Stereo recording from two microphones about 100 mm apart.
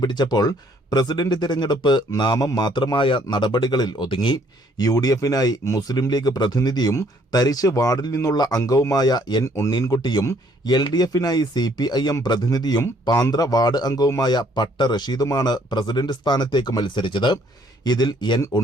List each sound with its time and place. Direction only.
0.0 s a man's voice: 45° left (ahead or behind)
4.8 s speech: 40° left (ahead or behind)
9.4 s speech: 30° left (ahead or behind)
10.0 s a man's voice: 45° left (ahead or behind)